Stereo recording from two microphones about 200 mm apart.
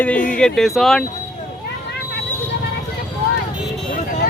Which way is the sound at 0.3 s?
Centre (ahead or behind).